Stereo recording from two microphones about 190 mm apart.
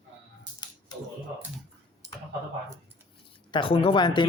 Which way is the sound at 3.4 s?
25° left (ahead or behind).